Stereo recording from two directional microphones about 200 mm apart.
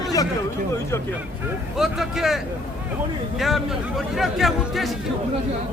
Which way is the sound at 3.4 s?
Centre (ahead or behind).